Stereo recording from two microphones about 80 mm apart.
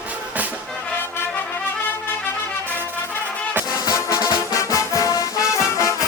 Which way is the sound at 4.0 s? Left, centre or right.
Left.